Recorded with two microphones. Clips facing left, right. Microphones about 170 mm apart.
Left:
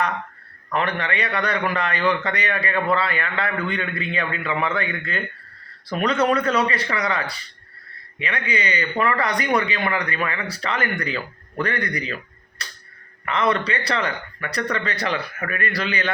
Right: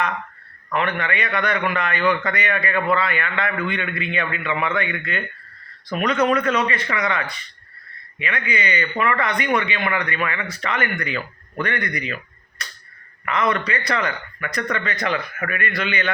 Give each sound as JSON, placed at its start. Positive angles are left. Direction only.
{"t": 0.7, "sound": "a man's voice", "side_deg": 35}
{"t": 12.6, "sound": "tick-tock", "side_deg": 30}
{"t": 13.2, "sound": "a man's voice", "side_deg": 30}